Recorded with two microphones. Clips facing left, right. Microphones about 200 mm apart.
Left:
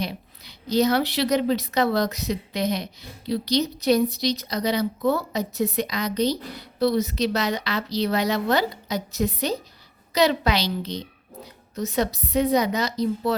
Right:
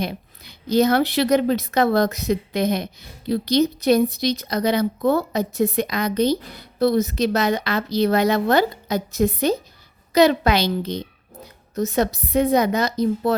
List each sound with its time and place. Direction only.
0.0 s speech: 50° right (ahead or behind)